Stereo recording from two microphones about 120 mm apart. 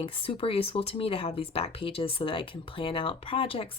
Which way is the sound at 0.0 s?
50° left (ahead or behind).